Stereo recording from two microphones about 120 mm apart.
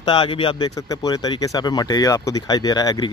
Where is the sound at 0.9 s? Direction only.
30° left (ahead or behind).